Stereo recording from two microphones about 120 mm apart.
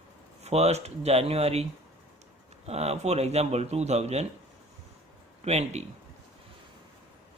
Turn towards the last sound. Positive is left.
turn(degrees=-65)  # may be behind; listen again after turning